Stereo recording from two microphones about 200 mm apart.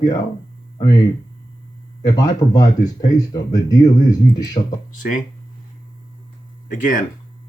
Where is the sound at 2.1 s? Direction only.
20° left (ahead or behind).